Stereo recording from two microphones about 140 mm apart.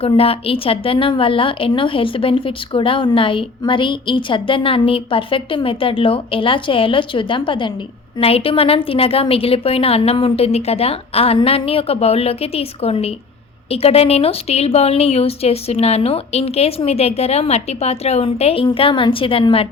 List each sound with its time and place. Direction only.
0.0 s a woman's voice: 45° left (ahead or behind)